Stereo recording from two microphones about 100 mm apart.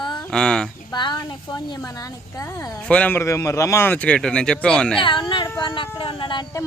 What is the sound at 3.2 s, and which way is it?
Speech, 30° left (ahead or behind).